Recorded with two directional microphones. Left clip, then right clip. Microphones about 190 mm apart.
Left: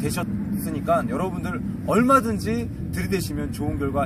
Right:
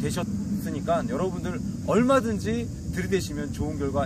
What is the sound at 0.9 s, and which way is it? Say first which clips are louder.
Speech: left 3 dB; 5° right (ahead or behind).